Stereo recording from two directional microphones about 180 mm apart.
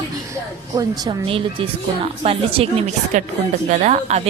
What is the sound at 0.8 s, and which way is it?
A woman's voice, 25° right (ahead or behind).